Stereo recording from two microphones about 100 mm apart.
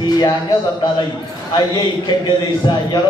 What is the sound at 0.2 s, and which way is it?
Speech, 45° left (ahead or behind).